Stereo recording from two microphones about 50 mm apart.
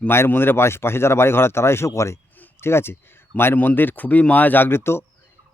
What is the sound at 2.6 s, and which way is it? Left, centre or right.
Speech, left.